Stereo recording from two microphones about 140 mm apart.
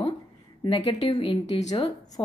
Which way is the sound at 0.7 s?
45° left (ahead or behind).